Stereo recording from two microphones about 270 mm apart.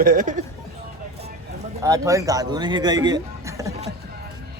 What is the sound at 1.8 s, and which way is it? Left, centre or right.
A man's voice, centre.